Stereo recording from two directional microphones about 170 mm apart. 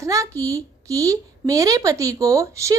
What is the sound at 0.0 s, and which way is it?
A woman's voice, 20° right (ahead or behind).